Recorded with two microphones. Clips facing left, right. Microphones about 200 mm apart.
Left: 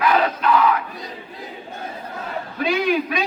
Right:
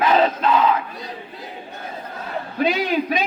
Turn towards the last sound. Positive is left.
turn(degrees=-20)  # may be behind; listen again after turning